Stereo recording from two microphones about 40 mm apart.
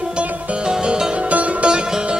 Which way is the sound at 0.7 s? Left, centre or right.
Centre.